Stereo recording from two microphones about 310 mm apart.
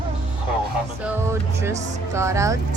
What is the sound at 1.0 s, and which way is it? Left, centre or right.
Music, centre.